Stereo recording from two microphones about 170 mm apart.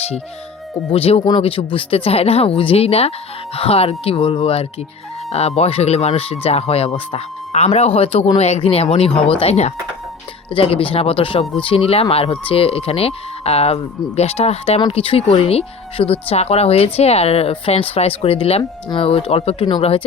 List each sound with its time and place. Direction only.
0.9 s speech: 35° left (ahead or behind)